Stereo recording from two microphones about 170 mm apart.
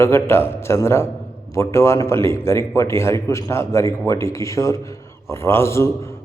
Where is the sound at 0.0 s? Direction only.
15° left (ahead or behind).